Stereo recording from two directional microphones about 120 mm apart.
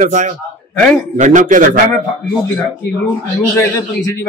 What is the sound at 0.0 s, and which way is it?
A man's voice, 90° right.